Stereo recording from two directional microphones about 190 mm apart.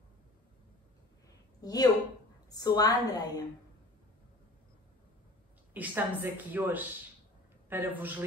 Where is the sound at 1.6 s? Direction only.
20° left (ahead or behind).